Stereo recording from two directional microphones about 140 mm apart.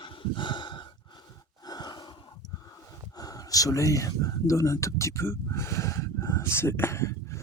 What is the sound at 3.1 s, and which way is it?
Speech, 25° left (ahead or behind).